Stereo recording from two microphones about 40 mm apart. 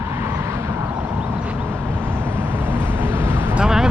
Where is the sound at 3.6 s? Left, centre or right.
Centre.